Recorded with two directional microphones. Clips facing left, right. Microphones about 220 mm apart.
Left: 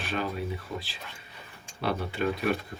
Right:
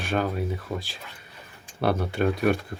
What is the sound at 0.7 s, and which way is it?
Speech, 65° right (ahead or behind).